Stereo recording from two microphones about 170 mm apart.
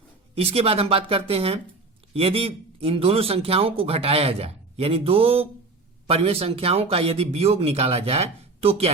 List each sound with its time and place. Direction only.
0.3 s a man's voice: 35° right (ahead or behind)